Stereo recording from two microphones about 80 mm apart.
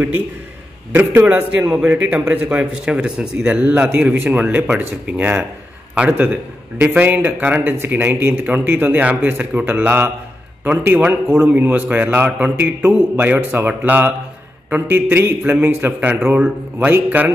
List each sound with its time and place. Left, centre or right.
0.9 s a man's voice: right